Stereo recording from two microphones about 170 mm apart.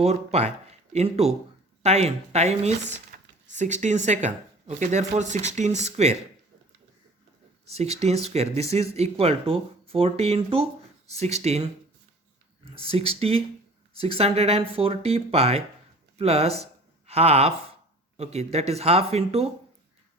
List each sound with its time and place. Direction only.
0.0 s speech: 40° right (ahead or behind)
7.7 s speech: 40° right (ahead or behind)
12.7 s speech: 35° right (ahead or behind)